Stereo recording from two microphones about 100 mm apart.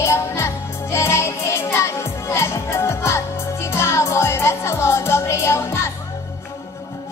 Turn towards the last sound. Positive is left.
turn(degrees=30)  # may be behind; listen again after turning